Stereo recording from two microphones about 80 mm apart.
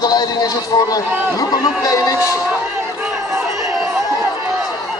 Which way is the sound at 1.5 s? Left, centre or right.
Left.